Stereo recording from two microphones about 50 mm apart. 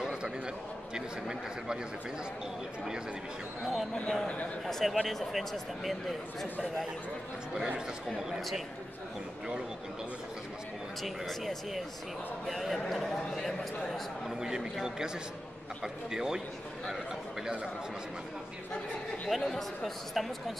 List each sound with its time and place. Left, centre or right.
0.0 s a sound: centre
0.9 s a man's voice: centre
3.9 s speech: centre
7.5 s a man's voice: centre
8.4 s speech: centre
11.0 s speech: centre
14.3 s a man's voice: centre
19.2 s speech: centre